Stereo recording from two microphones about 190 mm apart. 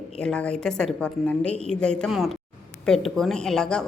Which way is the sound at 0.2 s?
5° left (ahead or behind).